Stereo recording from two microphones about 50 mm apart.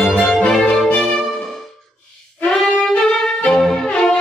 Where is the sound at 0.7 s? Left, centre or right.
Centre.